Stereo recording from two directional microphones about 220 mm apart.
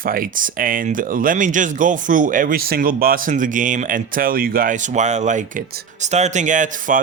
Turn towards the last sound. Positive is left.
turn(degrees=-35)  # may be behind; listen again after turning